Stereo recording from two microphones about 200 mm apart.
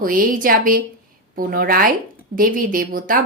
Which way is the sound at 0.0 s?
45° right (ahead or behind).